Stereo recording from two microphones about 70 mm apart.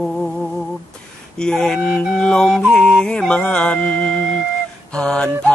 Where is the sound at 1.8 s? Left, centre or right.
Centre.